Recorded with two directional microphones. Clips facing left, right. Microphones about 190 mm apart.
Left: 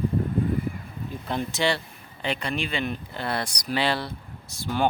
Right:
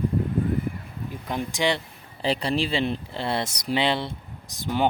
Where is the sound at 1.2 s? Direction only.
15° right (ahead or behind).